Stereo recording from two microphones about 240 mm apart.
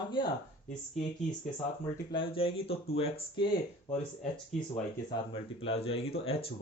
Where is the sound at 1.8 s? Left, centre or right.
Left.